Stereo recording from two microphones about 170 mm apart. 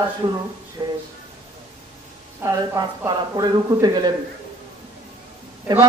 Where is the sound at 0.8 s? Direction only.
20° right (ahead or behind).